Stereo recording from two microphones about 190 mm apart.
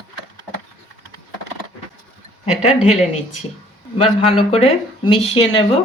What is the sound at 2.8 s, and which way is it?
Speech, 35° left (ahead or behind).